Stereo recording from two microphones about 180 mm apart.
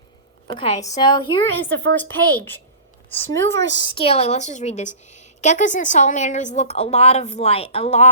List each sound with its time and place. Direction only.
0.4 s a woman's voice: 25° left (ahead or behind)
1.7 s a woman's voice: 80° right
2.3 s a child's voice: 10° left (ahead or behind)
3.3 s speech: 90° right
3.8 s a woman's voice: 30° left (ahead or behind)